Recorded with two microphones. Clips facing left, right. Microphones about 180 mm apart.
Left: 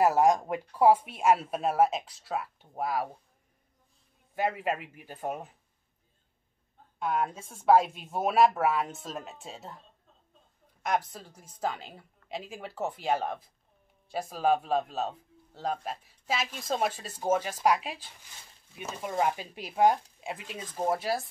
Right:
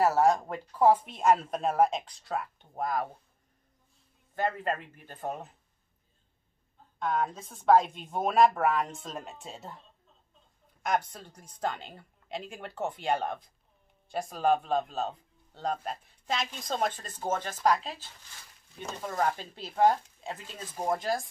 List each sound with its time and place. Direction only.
0.0 s a man's voice: 15° left (ahead or behind)
4.4 s a man's voice: 10° left (ahead or behind)
7.0 s a man's voice: 10° left (ahead or behind)
10.8 s a man's voice: centre (ahead or behind)